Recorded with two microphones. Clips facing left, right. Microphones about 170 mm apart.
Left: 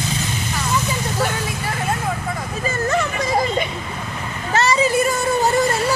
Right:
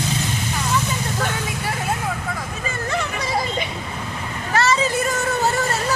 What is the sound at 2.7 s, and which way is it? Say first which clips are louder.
Music: left 5 dB; 45° left (ahead or behind).